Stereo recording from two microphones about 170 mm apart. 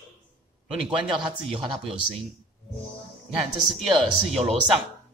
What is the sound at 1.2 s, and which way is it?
Speech, 30° right (ahead or behind).